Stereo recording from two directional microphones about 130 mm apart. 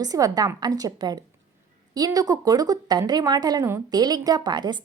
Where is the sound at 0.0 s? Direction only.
30° right (ahead or behind).